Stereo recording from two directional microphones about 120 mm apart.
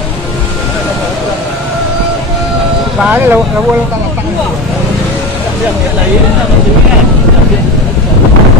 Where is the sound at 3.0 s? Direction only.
15° right (ahead or behind).